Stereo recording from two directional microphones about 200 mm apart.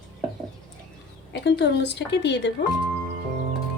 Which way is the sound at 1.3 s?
60° left (ahead or behind).